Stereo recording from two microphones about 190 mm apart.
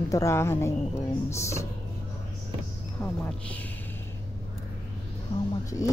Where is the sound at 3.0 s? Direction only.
10° left (ahead or behind).